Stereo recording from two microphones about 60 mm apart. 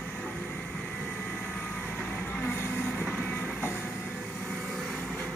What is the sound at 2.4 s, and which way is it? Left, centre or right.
Vehicle, left.